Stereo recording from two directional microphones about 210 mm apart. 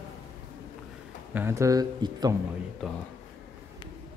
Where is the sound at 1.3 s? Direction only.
15° right (ahead or behind).